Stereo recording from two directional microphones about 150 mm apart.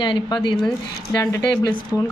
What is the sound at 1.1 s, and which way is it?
Speech, 15° left (ahead or behind).